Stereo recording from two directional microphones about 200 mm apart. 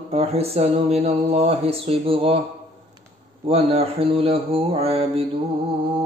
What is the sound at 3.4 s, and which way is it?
Mantra, 30° right (ahead or behind).